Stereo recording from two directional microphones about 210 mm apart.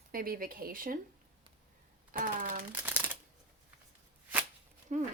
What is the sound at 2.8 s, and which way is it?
Shuffling cards, 10° right (ahead or behind).